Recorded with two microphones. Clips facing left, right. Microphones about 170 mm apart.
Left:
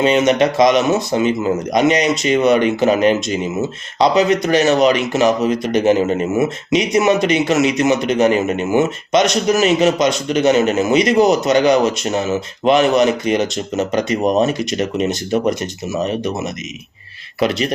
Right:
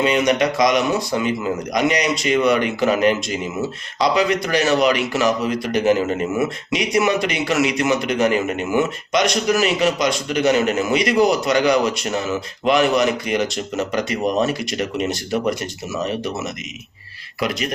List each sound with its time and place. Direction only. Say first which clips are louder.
0.0 s speech: left 4 dB; 25° left (ahead or behind)
17.4 s speech: left 6 dB; 30° left (ahead or behind)